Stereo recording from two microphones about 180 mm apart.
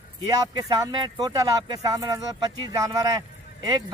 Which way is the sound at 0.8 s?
20° right (ahead or behind).